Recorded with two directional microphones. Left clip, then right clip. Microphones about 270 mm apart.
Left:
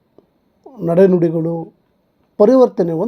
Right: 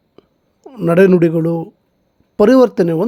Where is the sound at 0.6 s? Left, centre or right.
Right.